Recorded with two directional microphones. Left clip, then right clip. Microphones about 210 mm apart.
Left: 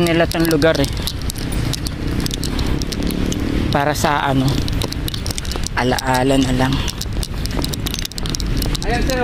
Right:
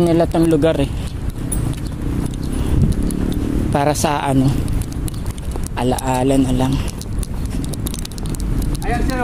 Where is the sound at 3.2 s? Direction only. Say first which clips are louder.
Left 1 dB; 20° right (ahead or behind).